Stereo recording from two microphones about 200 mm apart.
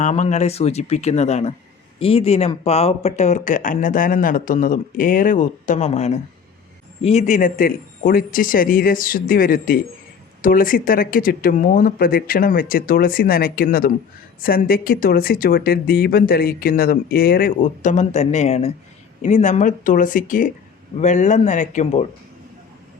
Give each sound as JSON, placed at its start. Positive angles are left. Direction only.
{"t": 0.0, "sound": "speech", "side_deg": 35}